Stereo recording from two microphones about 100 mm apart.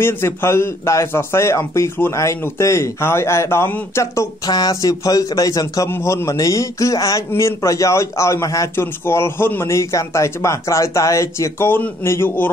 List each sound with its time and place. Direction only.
0.0 s a man's voice: 25° left (ahead or behind)
4.5 s a man's voice: 40° left (ahead or behind)
5.9 s a man's voice: 25° left (ahead or behind)